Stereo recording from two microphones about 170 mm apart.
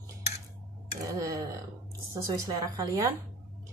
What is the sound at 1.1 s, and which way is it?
Speech, 20° right (ahead or behind).